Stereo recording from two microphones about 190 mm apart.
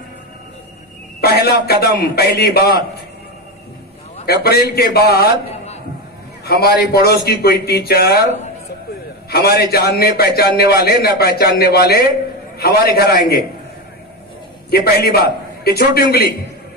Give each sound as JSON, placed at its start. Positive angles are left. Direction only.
{"t": 1.2, "sound": "a man's voice", "side_deg": 55}
{"t": 4.3, "sound": "a man's voice", "side_deg": 55}
{"t": 6.4, "sound": "a man's voice", "side_deg": 60}
{"t": 9.3, "sound": "a man's voice", "side_deg": 55}
{"t": 14.7, "sound": "a man's voice", "side_deg": 55}